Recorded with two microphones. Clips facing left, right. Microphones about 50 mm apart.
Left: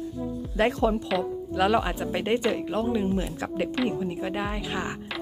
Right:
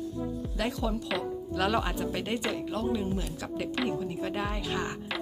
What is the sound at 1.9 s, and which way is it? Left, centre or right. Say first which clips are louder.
A woman's voice: left 5 dB; left.